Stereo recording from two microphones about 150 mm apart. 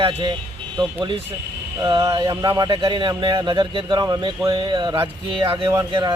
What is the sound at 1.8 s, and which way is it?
Music, 25° right (ahead or behind).